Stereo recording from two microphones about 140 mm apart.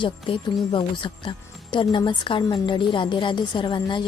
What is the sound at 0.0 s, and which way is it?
Speech, 35° left (ahead or behind).